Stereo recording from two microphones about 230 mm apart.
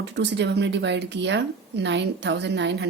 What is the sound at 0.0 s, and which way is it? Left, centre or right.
Speech, right.